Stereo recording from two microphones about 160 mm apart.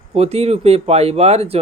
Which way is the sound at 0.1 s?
40° right (ahead or behind).